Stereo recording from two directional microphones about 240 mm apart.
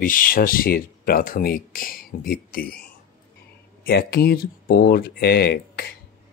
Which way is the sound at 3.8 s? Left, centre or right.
Left.